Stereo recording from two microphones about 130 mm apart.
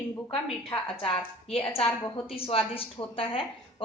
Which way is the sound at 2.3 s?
45° left (ahead or behind).